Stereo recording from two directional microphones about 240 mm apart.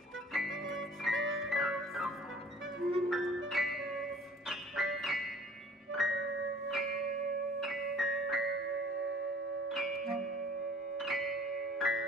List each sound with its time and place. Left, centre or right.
0.3 s music: centre
1.1 s music: right
1.5 s music: centre
9.7 s music: centre